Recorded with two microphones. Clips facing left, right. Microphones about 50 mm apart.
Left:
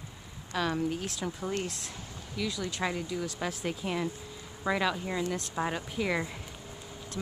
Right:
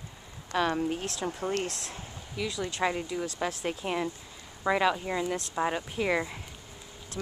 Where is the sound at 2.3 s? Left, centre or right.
Centre.